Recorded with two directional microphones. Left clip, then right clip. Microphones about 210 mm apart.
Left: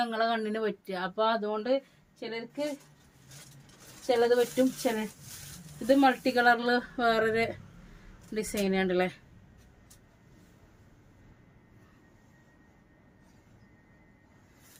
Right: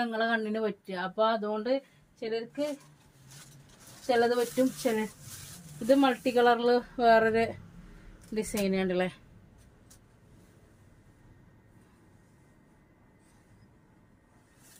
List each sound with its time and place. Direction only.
0.0 s speech: 20° left (ahead or behind)
4.0 s speech: 15° left (ahead or behind)